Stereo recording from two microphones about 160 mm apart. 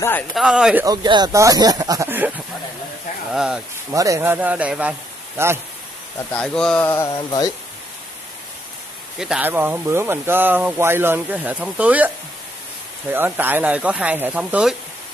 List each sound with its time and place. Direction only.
0.3 s speech: 5° right (ahead or behind)
0.8 s speech: 25° right (ahead or behind); by 3.6 s 5° right (ahead or behind)
3.9 s speech: 20° right (ahead or behind)
6.3 s speech: 5° left (ahead or behind)
7.2 s speech: 25° left (ahead or behind)
9.2 s speech: 10° right (ahead or behind)
13.1 s speech: 10° right (ahead or behind)